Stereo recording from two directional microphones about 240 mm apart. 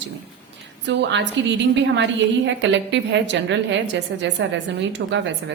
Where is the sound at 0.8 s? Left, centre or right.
Right.